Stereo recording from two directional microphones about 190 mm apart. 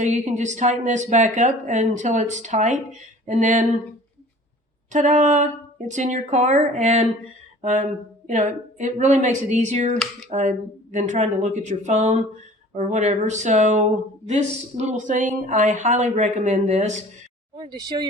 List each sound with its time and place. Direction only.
0.0 s speech: 35° right (ahead or behind)
4.9 s speech: 40° right (ahead or behind)
17.6 s speech: 20° right (ahead or behind)